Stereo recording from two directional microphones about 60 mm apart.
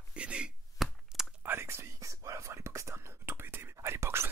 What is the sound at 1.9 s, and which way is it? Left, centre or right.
Whispering, right.